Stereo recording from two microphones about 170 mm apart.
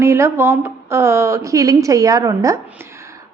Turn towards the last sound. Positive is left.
turn(degrees=-15)  # may be behind; listen again after turning